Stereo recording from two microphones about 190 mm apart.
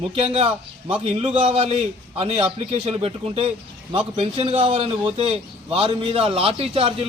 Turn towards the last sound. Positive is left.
turn(degrees=-30)  # may be behind; listen again after turning